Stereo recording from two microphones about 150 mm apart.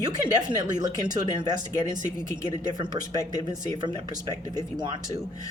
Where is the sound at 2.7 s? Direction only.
25° right (ahead or behind).